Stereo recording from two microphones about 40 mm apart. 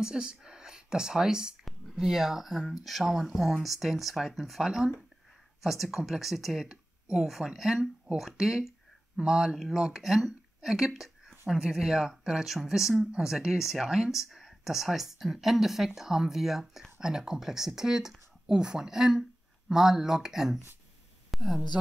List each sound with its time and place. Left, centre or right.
0.0 s speech: right
11.2 s a sound: centre
11.6 s speech: centre
21.3 s speech: centre